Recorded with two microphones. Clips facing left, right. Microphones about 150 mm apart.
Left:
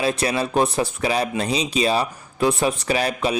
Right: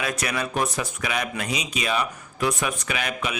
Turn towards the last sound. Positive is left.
turn(degrees=35)  # may be behind; listen again after turning